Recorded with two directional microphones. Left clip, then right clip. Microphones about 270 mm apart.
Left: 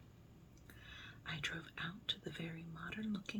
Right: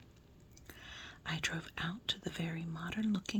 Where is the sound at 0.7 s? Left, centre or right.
Right.